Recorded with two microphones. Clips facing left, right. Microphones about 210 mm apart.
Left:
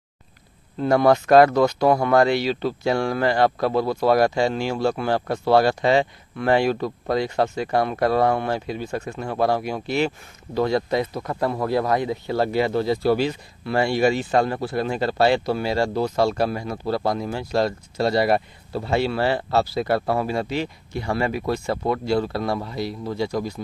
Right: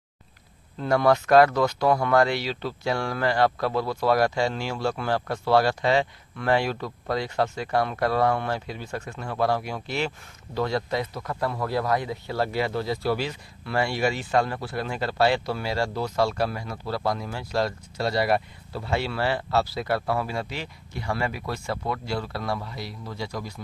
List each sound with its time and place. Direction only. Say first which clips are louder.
0.8 s speech: left 4 dB; 25° left (ahead or behind)